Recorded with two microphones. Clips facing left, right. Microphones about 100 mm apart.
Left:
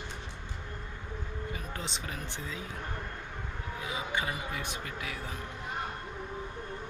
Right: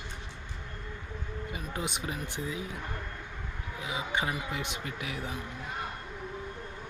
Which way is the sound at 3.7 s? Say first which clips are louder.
Right 2 dB; 20° right (ahead or behind).